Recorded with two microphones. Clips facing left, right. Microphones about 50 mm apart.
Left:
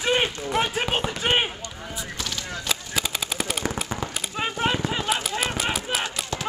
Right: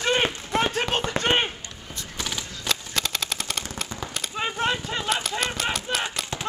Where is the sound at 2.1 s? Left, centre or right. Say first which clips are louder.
Right 3 dB; centre.